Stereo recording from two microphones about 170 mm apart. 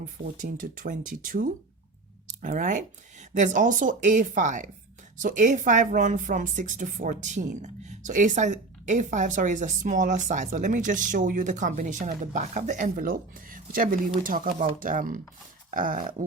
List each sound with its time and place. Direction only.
0.0 s a woman's voice: 55° right (ahead or behind)